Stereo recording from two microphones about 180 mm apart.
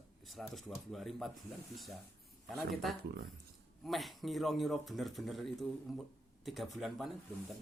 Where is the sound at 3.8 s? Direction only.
Centre (ahead or behind).